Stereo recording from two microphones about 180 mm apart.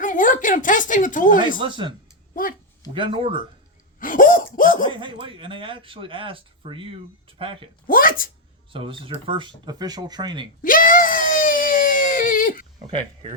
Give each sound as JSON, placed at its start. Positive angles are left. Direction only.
{"t": 0.0, "sound": "a sound", "side_deg": 45}
{"t": 1.5, "sound": "speech", "side_deg": -25}
{"t": 2.3, "sound": "speech", "side_deg": 50}
{"t": 2.9, "sound": "speech", "side_deg": -30}
{"t": 4.0, "sound": "laughter", "side_deg": 50}
{"t": 4.9, "sound": "speech", "side_deg": -25}
{"t": 7.9, "sound": "speech", "side_deg": 50}
{"t": 8.7, "sound": "speech", "side_deg": -30}
{"t": 10.6, "sound": "a sound", "side_deg": 50}